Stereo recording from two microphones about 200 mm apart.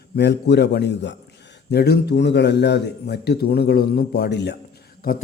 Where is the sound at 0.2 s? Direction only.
55° left (ahead or behind).